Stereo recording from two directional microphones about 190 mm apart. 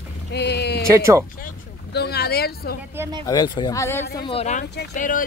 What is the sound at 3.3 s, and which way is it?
Speech, 20° left (ahead or behind).